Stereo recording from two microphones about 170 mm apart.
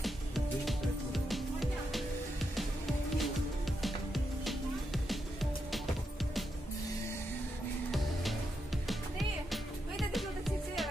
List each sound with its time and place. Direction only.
0.0 s music: centre (ahead or behind)
3.2 s music: centre (ahead or behind)
7.9 s music: centre (ahead or behind)
9.5 s music: centre (ahead or behind)